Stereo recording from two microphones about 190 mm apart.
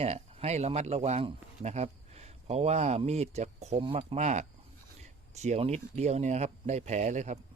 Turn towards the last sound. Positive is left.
turn(degrees=-40)  # may be behind; listen again after turning